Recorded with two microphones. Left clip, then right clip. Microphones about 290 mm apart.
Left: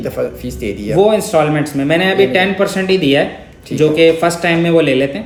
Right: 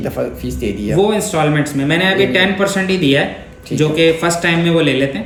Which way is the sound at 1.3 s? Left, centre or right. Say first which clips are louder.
Left 2 dB; centre.